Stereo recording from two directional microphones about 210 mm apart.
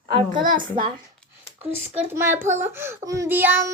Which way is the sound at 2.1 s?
10° right (ahead or behind).